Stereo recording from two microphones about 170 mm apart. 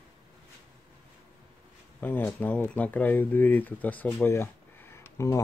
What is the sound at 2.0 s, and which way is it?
Speech, 10° left (ahead or behind).